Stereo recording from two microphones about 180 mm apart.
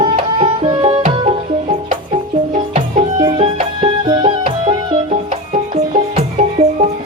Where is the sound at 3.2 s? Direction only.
30° right (ahead or behind).